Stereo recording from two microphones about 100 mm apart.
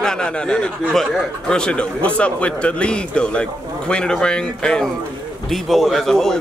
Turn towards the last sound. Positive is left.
turn(degrees=5)  # may be behind; listen again after turning